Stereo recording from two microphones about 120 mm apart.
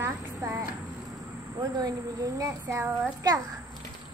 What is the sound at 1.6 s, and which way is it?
A child's voice, 30° right (ahead or behind).